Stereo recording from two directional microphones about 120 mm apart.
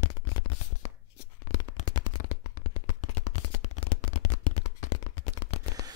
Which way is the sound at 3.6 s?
80° left.